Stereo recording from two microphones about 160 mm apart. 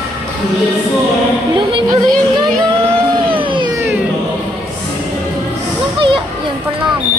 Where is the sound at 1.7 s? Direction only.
30° right (ahead or behind).